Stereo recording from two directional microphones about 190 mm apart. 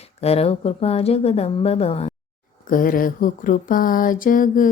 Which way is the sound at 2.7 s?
45° left (ahead or behind).